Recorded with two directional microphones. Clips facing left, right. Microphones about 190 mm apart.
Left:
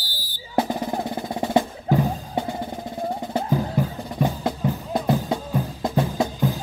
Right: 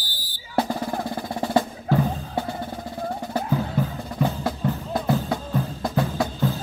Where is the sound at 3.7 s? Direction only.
15° left (ahead or behind).